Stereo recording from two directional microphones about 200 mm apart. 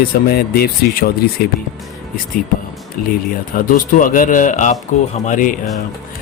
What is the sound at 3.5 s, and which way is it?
Speech, 45° left (ahead or behind).